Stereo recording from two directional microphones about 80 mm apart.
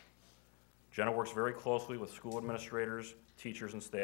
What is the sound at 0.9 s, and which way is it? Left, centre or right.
Speech, right.